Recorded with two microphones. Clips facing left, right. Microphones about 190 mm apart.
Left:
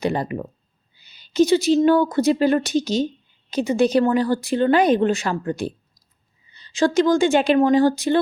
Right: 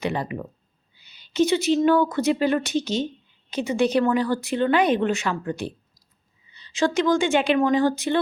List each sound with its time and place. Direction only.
0.0 s speech: 40° left (ahead or behind)